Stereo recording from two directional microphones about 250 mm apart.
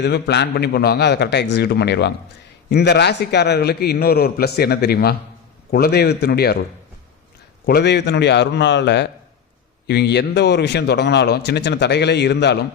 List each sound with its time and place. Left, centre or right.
0.0 s speech: left
7.7 s a man's voice: left